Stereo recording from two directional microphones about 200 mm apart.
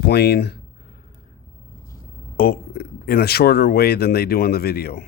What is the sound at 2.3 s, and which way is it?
Speech, 50° left (ahead or behind).